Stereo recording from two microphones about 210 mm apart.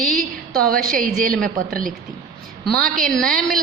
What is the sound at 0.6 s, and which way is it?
Speech, 45° right (ahead or behind).